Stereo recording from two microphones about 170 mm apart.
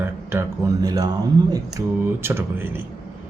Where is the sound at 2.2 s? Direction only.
15° right (ahead or behind).